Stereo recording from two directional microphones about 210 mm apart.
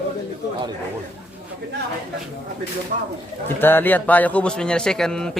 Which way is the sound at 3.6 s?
10° left (ahead or behind).